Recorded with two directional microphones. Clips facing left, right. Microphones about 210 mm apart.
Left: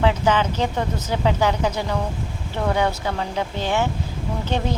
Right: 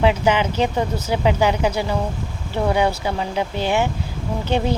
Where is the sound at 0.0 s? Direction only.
10° right (ahead or behind).